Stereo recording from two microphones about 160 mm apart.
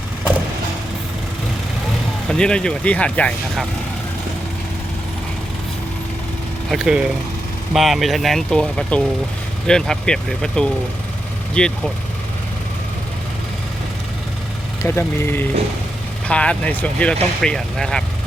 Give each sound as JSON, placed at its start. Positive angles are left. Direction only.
{"t": 2.3, "sound": "speech", "side_deg": 5}
{"t": 6.7, "sound": "speech", "side_deg": -5}
{"t": 14.8, "sound": "speech", "side_deg": 15}